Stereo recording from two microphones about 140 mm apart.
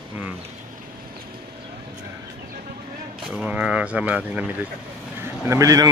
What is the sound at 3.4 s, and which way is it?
Speech, 10° right (ahead or behind).